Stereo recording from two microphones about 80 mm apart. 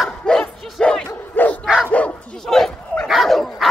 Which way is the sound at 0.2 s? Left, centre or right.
Centre.